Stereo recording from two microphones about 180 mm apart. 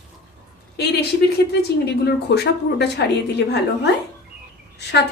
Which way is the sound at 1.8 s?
65° left (ahead or behind).